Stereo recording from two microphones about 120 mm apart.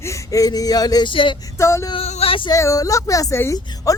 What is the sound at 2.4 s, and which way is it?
A woman's voice, 25° left (ahead or behind).